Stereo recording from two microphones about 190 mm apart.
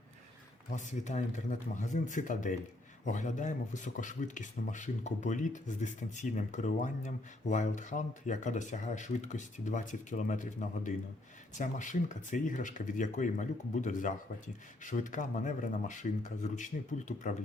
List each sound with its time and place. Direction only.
0.7 s speech: 40° left (ahead or behind)